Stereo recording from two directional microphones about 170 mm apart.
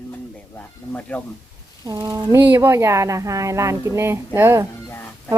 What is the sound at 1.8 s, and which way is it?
A woman's voice, 25° right (ahead or behind).